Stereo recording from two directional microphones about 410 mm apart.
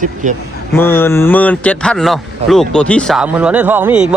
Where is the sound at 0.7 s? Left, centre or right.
Centre.